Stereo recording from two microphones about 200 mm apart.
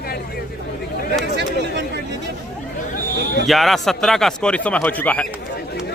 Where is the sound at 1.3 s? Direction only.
60° right (ahead or behind).